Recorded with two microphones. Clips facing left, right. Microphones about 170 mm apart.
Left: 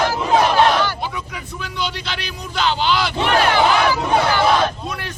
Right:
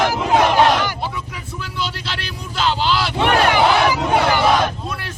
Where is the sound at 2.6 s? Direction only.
Centre (ahead or behind).